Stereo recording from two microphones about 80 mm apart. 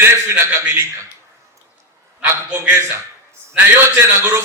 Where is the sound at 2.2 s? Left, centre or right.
Right.